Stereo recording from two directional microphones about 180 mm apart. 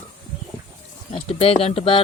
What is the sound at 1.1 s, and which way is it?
Speech, 35° left (ahead or behind).